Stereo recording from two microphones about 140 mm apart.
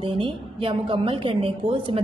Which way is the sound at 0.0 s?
35° right (ahead or behind).